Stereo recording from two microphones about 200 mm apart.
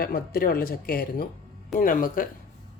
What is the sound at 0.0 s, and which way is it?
Speech, 45° left (ahead or behind).